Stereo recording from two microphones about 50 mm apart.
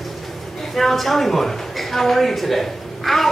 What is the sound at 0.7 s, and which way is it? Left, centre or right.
A man's voice, centre.